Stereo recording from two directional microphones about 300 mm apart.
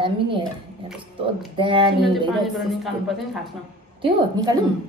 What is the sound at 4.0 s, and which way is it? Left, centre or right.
Speech, centre.